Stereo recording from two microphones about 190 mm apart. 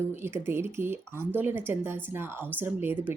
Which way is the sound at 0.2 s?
15° right (ahead or behind).